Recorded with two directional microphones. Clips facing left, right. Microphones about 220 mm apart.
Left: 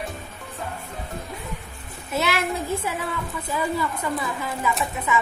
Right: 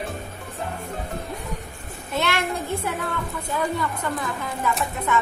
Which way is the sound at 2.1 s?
5° left (ahead or behind).